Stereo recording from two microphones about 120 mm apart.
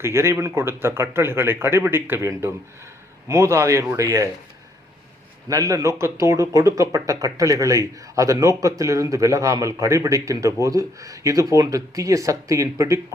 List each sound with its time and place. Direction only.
0.0 s speech: 20° right (ahead or behind)
5.5 s speech: 30° right (ahead or behind)